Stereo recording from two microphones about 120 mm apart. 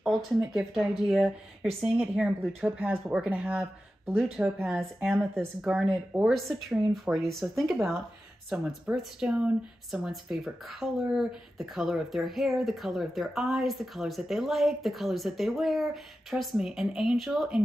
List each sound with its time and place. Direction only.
0.0 s speech: 5° right (ahead or behind)
5.2 s speech: 20° right (ahead or behind)
5.6 s speech: 5° right (ahead or behind)